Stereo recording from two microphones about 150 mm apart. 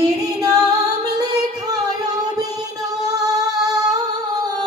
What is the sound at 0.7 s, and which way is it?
Singing, 25° right (ahead or behind).